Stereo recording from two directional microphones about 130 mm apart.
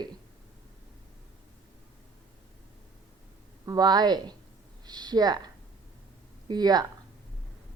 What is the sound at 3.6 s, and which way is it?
Speech, 30° right (ahead or behind).